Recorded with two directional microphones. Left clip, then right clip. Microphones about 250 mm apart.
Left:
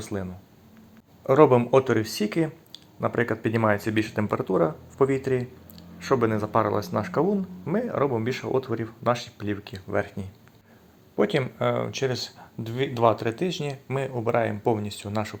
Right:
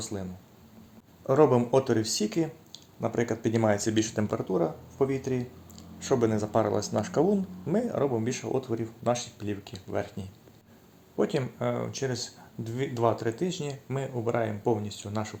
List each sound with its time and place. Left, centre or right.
0.0 s speech: centre
1.3 s speech: centre
4.4 s speech: left
6.0 s speech: centre